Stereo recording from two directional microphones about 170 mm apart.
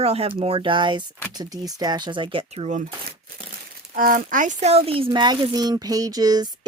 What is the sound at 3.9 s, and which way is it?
Speech, 55° right (ahead or behind).